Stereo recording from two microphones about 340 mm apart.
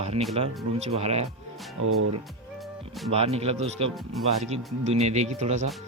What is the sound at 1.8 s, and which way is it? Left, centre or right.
Speech, right.